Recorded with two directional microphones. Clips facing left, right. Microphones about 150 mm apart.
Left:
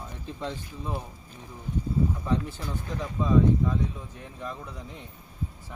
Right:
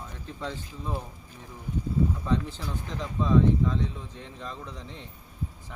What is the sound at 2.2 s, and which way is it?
Speech, 15° left (ahead or behind).